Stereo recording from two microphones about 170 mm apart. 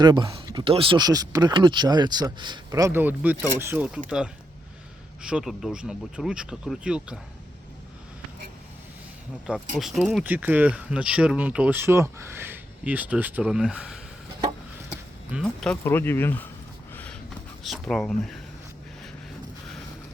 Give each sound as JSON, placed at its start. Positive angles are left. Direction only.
{"t": 0.0, "sound": "speech", "side_deg": -25}
{"t": 5.2, "sound": "speech", "side_deg": -5}
{"t": 9.7, "sound": "speech", "side_deg": 0}
{"t": 10.2, "sound": "speech", "side_deg": -10}
{"t": 16.9, "sound": "a sound", "side_deg": 10}
{"t": 17.6, "sound": "speech", "side_deg": 0}